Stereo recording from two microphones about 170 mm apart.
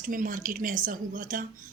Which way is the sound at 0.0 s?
50° right (ahead or behind).